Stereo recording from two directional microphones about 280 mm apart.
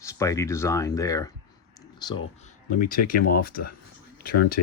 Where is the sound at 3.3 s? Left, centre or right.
Left.